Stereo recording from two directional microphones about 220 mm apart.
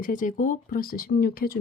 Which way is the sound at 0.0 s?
35° left (ahead or behind).